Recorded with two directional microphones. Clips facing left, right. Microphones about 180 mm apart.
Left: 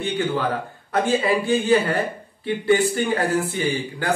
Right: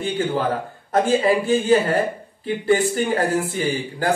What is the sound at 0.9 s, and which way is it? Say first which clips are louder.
A man's voice: right 3 dB; 40° right (ahead or behind).